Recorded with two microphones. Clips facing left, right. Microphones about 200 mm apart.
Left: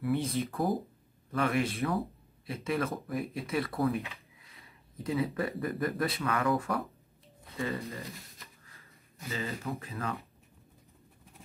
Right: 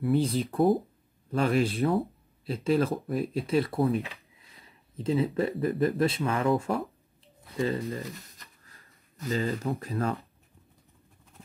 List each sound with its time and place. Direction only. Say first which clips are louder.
0.0 s speech: right 5 dB; 30° right (ahead or behind)
9.3 s speech: right 7 dB; 35° right (ahead or behind)